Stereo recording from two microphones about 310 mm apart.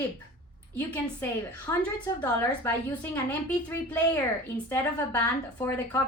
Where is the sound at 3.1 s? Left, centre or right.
Centre.